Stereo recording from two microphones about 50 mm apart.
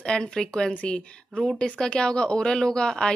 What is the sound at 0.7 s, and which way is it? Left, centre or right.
A woman's voice, left.